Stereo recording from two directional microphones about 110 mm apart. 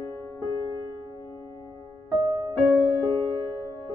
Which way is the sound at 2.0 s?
35° right (ahead or behind).